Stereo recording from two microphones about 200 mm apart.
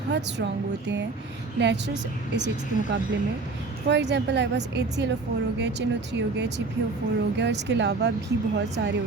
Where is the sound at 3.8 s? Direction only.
60° right (ahead or behind).